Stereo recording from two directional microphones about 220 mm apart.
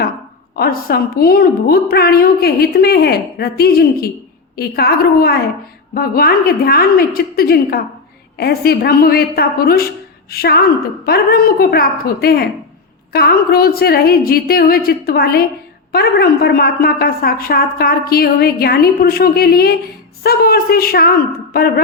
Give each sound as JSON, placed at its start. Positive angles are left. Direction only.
{"t": 0.5, "sound": "a woman's voice", "side_deg": 45}